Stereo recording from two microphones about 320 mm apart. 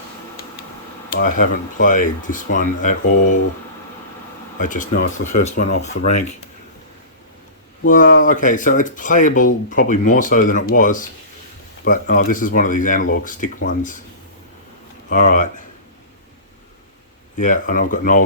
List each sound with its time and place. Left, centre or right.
1.1 s speech: left
4.5 s speech: left
7.9 s speech: left
15.1 s speech: left
17.4 s speech: left